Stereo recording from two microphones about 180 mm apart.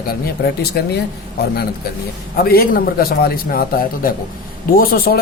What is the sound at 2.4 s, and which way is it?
A man's voice, 55° left (ahead or behind).